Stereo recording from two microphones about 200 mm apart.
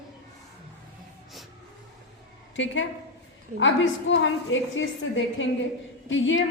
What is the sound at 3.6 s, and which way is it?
A woman's voice, 70° left (ahead or behind).